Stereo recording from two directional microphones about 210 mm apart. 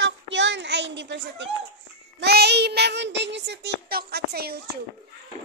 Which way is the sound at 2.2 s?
50° right (ahead or behind).